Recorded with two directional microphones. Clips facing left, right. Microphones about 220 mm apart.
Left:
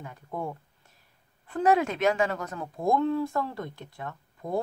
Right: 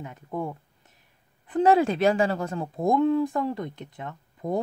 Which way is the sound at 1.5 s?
30° right (ahead or behind).